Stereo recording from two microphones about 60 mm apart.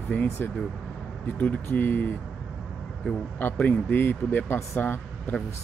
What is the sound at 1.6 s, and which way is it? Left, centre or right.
Speech, left.